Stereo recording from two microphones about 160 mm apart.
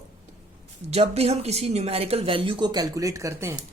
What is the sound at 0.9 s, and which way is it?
Speech, 40° right (ahead or behind).